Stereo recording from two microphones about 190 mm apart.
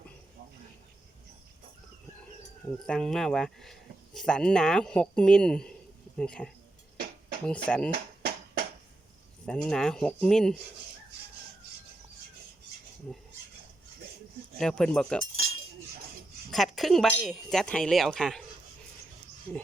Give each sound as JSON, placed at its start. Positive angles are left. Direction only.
{"t": 2.8, "sound": "speech", "side_deg": 5}
{"t": 9.5, "sound": "speech", "side_deg": 5}
{"t": 13.1, "sound": "speech", "side_deg": 5}
{"t": 14.6, "sound": "speech", "side_deg": 5}
{"t": 15.4, "sound": "chink", "side_deg": -90}
{"t": 16.5, "sound": "speech", "side_deg": 0}